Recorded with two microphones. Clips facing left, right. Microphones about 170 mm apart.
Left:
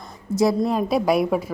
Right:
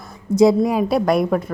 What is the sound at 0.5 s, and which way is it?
Speech, 5° right (ahead or behind).